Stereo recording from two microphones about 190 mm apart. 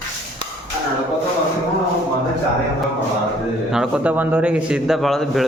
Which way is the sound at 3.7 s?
5° right (ahead or behind).